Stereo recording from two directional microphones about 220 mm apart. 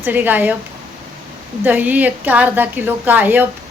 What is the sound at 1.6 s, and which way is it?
A woman's voice, 10° right (ahead or behind).